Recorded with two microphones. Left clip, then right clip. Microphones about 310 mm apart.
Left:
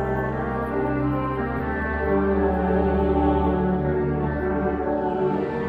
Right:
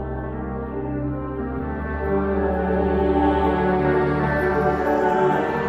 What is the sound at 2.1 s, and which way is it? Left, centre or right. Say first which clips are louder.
Music: even; centre.